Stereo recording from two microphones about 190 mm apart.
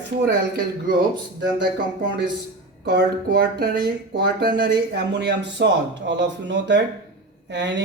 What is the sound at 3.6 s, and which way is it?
Speech, 55° right (ahead or behind).